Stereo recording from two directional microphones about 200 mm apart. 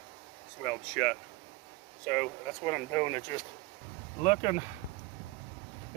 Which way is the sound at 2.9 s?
15° left (ahead or behind).